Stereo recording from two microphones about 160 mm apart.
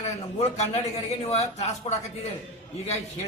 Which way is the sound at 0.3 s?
40° left (ahead or behind).